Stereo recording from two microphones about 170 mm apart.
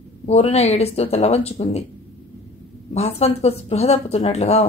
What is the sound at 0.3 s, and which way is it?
Speech, 40° left (ahead or behind).